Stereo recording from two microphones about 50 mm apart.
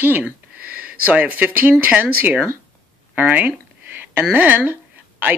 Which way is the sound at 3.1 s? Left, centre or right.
Right.